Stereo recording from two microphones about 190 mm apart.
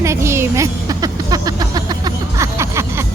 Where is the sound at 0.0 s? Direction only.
15° right (ahead or behind).